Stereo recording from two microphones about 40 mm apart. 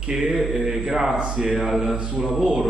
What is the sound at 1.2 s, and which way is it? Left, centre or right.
Speech, right.